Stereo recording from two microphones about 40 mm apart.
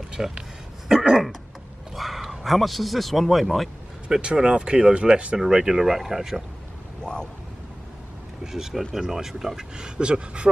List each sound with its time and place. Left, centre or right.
0.1 s a sound: centre
2.0 s a man's voice: centre
4.1 s speech: right
5.9 s speech: centre
7.0 s vehicle: left
8.5 s speech: centre; by 10.5 s right